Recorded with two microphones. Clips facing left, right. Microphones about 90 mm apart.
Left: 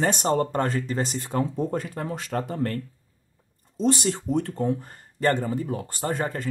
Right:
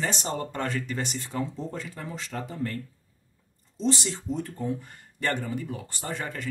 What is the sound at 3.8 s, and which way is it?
Speech, 50° left (ahead or behind).